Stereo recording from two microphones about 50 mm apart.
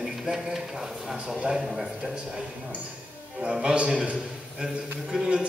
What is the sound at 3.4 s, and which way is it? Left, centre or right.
Speech, centre.